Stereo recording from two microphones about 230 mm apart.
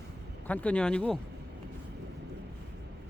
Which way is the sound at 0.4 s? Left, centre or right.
Centre.